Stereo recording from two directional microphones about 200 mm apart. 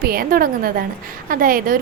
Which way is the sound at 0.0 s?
50° right (ahead or behind).